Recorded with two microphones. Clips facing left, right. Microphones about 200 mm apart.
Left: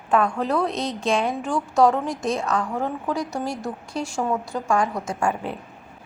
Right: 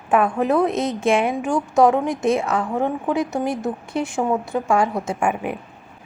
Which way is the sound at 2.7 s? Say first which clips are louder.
Right 5 dB; 20° right (ahead or behind).